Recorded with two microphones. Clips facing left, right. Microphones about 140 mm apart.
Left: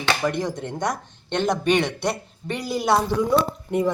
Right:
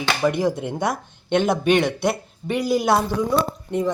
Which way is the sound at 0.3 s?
5° right (ahead or behind).